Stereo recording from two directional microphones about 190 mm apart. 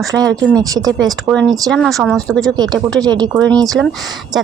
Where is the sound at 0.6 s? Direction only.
20° right (ahead or behind).